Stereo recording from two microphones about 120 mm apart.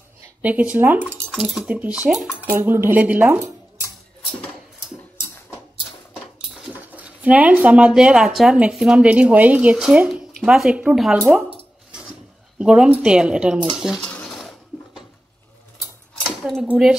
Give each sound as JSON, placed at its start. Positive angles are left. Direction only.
{"t": 0.4, "sound": "speech", "side_deg": -10}
{"t": 2.6, "sound": "speech", "side_deg": -20}
{"t": 6.8, "sound": "speech", "side_deg": -10}
{"t": 14.0, "sound": "a sound", "side_deg": 10}
{"t": 16.3, "sound": "cutlery", "side_deg": 0}
{"t": 16.6, "sound": "speech", "side_deg": -10}